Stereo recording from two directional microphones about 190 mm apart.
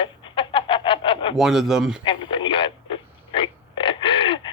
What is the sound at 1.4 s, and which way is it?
Speech, centre (ahead or behind).